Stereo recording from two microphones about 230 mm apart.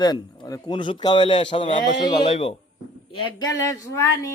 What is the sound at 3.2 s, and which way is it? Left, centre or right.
Speech, centre.